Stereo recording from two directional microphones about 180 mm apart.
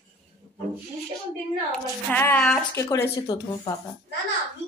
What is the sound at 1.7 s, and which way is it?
Speech, 10° left (ahead or behind).